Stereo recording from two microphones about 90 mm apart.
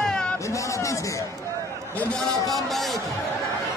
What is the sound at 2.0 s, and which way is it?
Speech, 15° left (ahead or behind).